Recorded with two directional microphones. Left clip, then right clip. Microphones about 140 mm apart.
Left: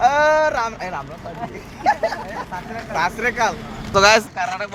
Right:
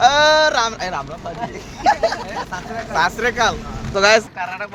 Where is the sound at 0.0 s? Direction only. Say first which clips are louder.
Right 2 dB; 5° right (ahead or behind).